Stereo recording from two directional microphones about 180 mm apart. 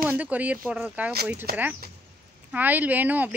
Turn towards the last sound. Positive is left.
turn(degrees=-10)  # may be behind; listen again after turning